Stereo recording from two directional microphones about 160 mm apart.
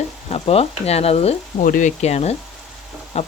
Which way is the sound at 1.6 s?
55° left (ahead or behind).